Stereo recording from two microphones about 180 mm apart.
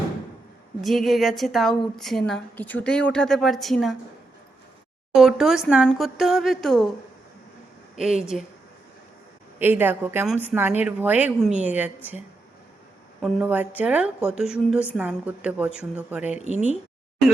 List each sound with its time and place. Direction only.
0.8 s a woman's voice: centre (ahead or behind)
5.1 s a woman's voice: centre (ahead or behind)
7.9 s a woman's voice: 5° right (ahead or behind)
9.6 s a woman's voice: 10° right (ahead or behind)
13.2 s a woman's voice: 10° right (ahead or behind)
16.4 s speech: 40° right (ahead or behind)